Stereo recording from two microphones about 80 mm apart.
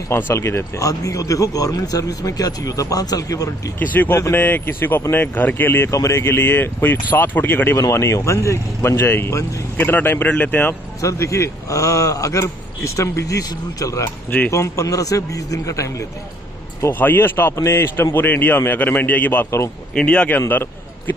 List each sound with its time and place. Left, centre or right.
0.1 s a man's voice: left
0.8 s speech: left
3.8 s a man's voice: left
6.2 s a man's voice: left
7.9 s a man's voice: left
9.8 s a man's voice: left
10.7 s a man's voice: left
17.0 s a man's voice: left
20.3 s a man's voice: left